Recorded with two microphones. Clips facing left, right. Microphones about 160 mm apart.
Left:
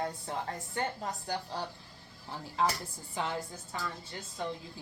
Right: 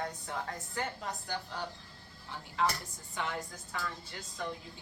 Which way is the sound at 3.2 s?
30° left (ahead or behind).